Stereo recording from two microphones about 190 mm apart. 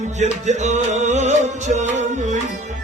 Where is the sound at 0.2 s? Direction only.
40° right (ahead or behind).